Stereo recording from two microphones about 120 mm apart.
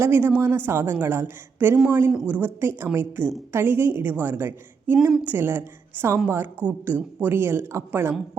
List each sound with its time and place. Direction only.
0.0 s a woman's voice: 20° right (ahead or behind)